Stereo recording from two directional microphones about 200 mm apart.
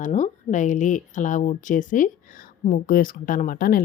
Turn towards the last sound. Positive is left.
turn(degrees=45)  # may be behind; listen again after turning